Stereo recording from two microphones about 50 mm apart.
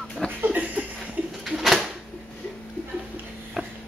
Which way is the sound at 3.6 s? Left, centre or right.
Centre.